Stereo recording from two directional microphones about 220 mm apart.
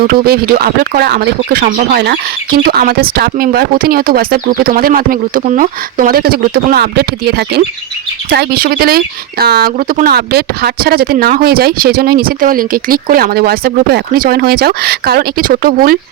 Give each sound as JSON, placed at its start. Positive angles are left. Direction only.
{"t": 0.0, "sound": "speech", "side_deg": -45}